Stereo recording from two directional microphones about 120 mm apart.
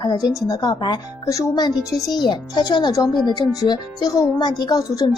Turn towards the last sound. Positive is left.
turn(degrees=35)  # may be behind; listen again after turning